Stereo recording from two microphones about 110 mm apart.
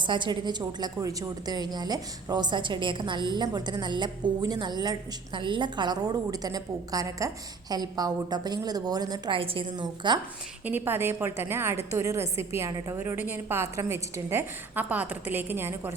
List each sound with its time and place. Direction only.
0.0 s a woman's voice: 45° right (ahead or behind)
9.3 s a woman's voice: 55° right (ahead or behind)
9.8 s a woman's voice: 45° right (ahead or behind)
10.7 s a woman's voice: 20° right (ahead or behind)